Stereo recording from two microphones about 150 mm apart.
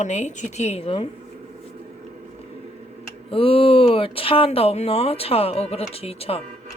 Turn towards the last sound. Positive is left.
turn(degrees=40)  # may be behind; listen again after turning